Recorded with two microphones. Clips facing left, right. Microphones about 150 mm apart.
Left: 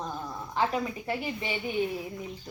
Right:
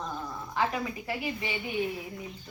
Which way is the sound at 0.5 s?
25° left (ahead or behind).